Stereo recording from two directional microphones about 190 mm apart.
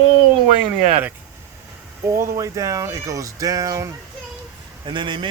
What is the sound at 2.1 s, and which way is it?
A man's voice, 15° right (ahead or behind).